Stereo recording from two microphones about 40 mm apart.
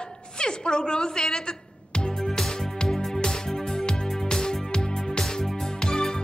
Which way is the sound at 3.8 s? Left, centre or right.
Centre.